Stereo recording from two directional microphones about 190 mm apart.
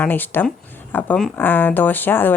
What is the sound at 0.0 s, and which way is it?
Speech, 10° left (ahead or behind).